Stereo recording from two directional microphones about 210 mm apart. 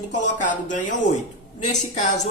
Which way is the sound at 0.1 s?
35° left (ahead or behind).